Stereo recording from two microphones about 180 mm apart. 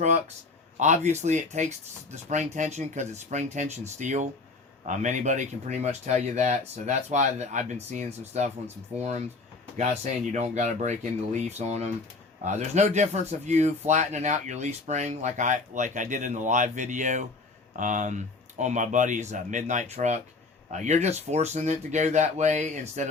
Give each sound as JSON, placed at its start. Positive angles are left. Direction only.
{"t": 0.8, "sound": "speech", "side_deg": -40}